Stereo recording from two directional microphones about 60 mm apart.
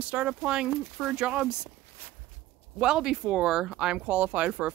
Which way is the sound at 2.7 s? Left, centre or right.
Centre.